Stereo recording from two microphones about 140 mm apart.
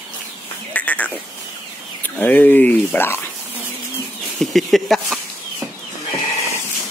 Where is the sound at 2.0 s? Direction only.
15° left (ahead or behind).